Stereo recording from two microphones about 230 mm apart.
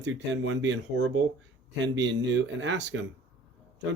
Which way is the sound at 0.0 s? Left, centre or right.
Right.